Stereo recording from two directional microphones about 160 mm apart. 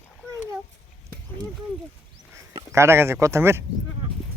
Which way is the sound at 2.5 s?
15° right (ahead or behind).